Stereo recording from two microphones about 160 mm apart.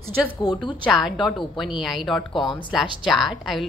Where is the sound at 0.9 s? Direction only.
Centre (ahead or behind).